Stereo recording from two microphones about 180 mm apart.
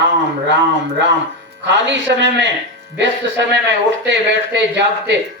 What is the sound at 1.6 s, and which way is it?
Speech, 80° right.